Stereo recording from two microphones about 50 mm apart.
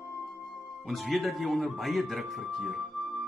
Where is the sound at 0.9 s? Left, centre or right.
Centre.